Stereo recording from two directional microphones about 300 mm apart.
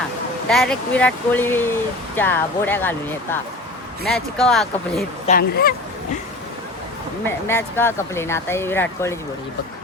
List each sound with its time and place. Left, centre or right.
0.4 s speech: centre
4.0 s speech: centre
5.2 s speech: left
7.3 s speech: centre